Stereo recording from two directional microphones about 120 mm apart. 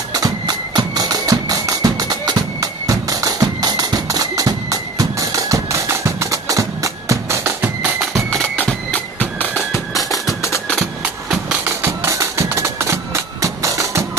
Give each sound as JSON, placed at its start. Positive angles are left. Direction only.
{"t": 0.1, "sound": "music", "side_deg": -30}
{"t": 8.0, "sound": "music", "side_deg": 0}
{"t": 10.0, "sound": "music", "side_deg": 30}
{"t": 11.0, "sound": "music", "side_deg": -5}
{"t": 11.6, "sound": "music", "side_deg": -20}